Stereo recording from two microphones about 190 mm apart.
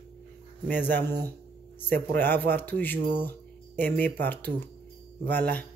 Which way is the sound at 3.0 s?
55° right (ahead or behind).